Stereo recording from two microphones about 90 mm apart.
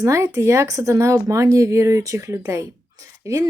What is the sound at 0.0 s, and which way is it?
A woman's voice, 35° right (ahead or behind).